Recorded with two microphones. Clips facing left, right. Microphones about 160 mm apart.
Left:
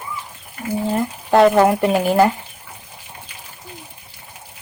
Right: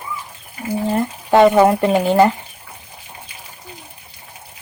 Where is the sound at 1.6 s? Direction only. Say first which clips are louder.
Right 2 dB; 5° left (ahead or behind).